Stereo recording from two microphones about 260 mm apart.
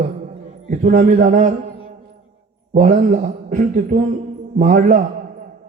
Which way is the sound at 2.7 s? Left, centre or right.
Right.